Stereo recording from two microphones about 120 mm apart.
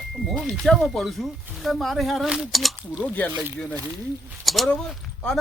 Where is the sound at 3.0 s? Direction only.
15° left (ahead or behind).